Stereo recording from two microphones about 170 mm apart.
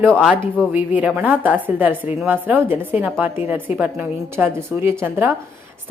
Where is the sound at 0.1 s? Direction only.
5° right (ahead or behind).